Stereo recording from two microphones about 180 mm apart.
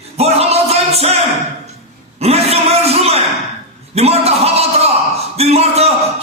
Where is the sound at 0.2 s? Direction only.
35° right (ahead or behind).